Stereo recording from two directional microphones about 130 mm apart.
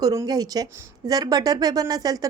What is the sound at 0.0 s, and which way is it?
A woman's voice, 25° right (ahead or behind).